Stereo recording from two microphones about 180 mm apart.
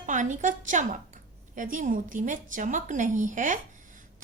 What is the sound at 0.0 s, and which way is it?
A woman's voice, 45° right (ahead or behind).